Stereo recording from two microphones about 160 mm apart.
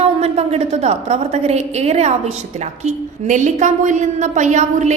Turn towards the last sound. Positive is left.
turn(degrees=-50)  # may be behind; listen again after turning